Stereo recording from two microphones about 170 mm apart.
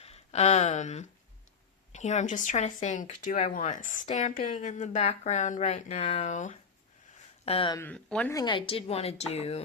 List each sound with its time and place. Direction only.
0.0 s a woman's voice: 35° left (ahead or behind)
7.4 s a woman's voice: 30° left (ahead or behind)
7.8 s speech: 10° left (ahead or behind)
8.3 s a woman's voice: 25° left (ahead or behind)